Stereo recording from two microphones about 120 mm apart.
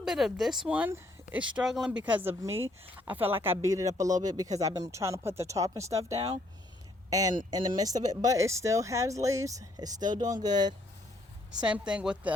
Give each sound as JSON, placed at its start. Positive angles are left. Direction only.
{"t": 0.0, "sound": "speech", "side_deg": -5}
{"t": 2.4, "sound": "speech", "side_deg": -20}
{"t": 11.6, "sound": "speech", "side_deg": -10}